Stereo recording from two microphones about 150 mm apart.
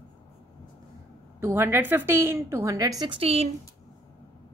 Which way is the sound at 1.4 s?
15° right (ahead or behind).